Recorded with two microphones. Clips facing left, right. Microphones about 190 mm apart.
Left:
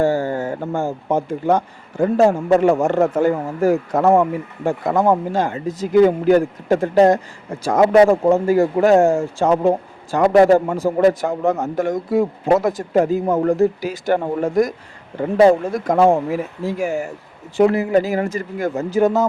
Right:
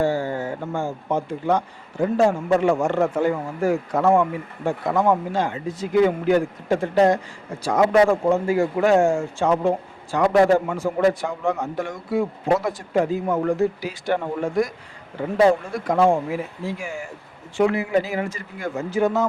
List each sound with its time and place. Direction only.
0.0 s speech: 45° left (ahead or behind)